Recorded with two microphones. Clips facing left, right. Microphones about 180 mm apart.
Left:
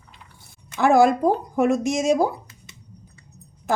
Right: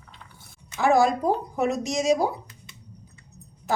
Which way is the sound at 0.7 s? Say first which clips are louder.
Left 4 dB; 55° left (ahead or behind).